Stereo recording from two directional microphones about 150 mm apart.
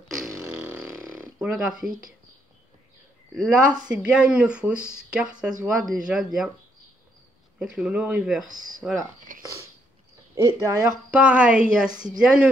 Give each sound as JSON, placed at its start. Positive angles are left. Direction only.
{"t": 0.5, "sound": "snoring", "side_deg": -5}
{"t": 3.3, "sound": "speech", "side_deg": -5}
{"t": 7.5, "sound": "speech", "side_deg": -5}
{"t": 8.5, "sound": "speech", "side_deg": -60}
{"t": 10.3, "sound": "speech", "side_deg": -20}
{"t": 11.1, "sound": "speech", "side_deg": -10}